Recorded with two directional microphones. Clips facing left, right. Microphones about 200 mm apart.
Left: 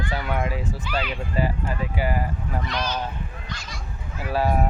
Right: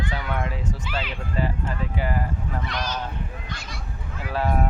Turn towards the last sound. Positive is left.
turn(degrees=10)  # may be behind; listen again after turning